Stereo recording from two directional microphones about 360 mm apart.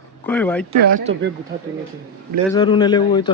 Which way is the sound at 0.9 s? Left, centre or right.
Right.